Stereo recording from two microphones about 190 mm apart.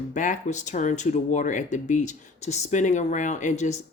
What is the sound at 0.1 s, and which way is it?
Speech, 40° left (ahead or behind).